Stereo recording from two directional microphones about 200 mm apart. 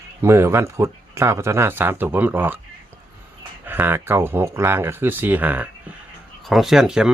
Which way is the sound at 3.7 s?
10° right (ahead or behind).